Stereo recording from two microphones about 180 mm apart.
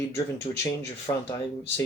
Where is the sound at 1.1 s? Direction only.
20° left (ahead or behind).